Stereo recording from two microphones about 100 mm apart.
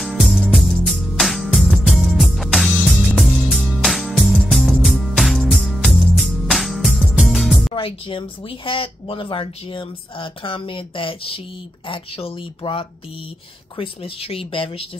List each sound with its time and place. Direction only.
0.0 s music: centre (ahead or behind)
7.7 s speech: 60° left (ahead or behind)